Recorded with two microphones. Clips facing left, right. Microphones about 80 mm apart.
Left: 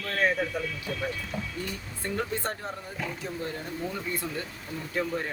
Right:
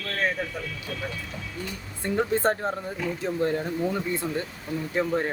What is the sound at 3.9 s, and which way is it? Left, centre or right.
Speech, right.